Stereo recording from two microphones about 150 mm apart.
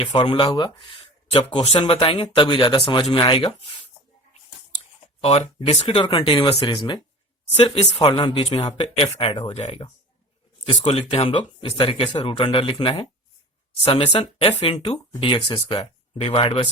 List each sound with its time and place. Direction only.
0.0 s speech: 30° left (ahead or behind)
5.2 s speech: 40° left (ahead or behind)
7.5 s speech: 40° left (ahead or behind)